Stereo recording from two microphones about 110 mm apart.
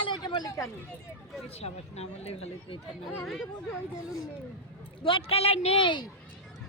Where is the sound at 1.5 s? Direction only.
70° left (ahead or behind).